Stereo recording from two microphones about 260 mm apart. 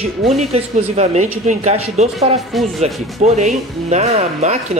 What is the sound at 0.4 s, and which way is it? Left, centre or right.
Speech, right.